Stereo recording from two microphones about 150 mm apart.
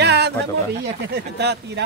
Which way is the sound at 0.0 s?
90° right.